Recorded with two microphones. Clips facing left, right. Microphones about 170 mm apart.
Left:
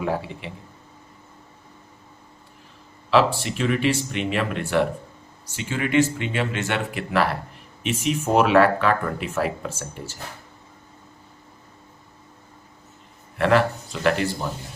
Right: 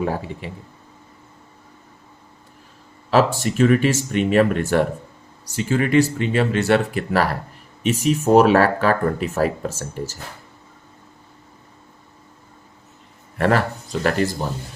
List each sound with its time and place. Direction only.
0.0 s speech: 40° right (ahead or behind)
3.1 s speech: 45° right (ahead or behind)
13.4 s speech: 40° right (ahead or behind)